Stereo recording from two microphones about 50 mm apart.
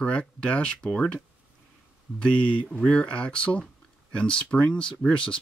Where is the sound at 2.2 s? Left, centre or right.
Left.